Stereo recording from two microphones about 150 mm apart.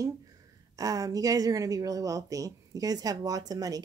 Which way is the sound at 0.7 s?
20° right (ahead or behind).